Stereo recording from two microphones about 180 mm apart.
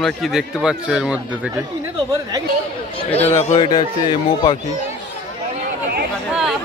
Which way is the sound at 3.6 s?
25° left (ahead or behind).